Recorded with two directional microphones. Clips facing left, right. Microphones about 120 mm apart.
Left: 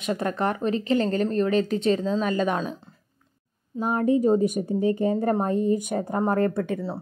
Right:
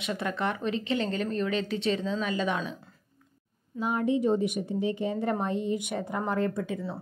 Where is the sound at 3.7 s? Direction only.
45° left (ahead or behind); by 6.8 s 60° left (ahead or behind).